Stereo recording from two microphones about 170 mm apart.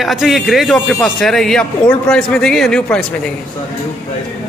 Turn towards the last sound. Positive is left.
turn(degrees=5)  # may be behind; listen again after turning